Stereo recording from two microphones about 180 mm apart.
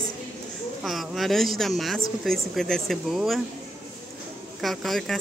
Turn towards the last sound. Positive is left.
turn(degrees=0)  # may be behind; listen again after turning